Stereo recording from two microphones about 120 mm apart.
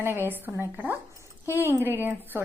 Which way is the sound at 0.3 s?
15° right (ahead or behind).